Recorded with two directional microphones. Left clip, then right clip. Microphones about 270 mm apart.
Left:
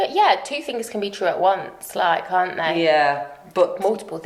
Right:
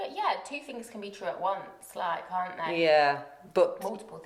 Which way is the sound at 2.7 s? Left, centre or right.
Right.